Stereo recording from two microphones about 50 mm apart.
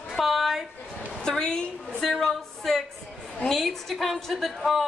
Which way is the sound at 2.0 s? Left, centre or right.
Centre.